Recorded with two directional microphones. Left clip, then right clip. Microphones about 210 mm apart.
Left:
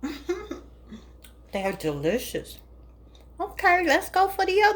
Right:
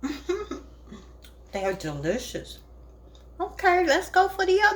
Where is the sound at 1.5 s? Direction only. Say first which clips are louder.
Left 1 dB; 30° left (ahead or behind).